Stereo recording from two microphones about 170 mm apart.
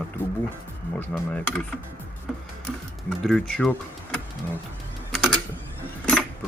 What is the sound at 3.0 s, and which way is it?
Speech, 5° left (ahead or behind).